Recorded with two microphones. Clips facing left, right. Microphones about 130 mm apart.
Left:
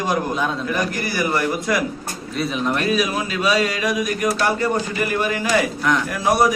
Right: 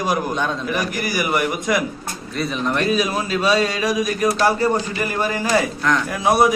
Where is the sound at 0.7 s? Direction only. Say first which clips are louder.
Even; 15° right (ahead or behind).